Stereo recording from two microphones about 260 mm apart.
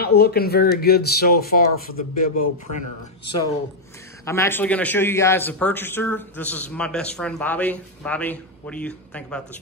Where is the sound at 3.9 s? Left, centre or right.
Centre.